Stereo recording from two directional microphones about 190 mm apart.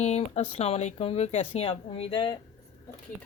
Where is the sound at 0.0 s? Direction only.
35° left (ahead or behind).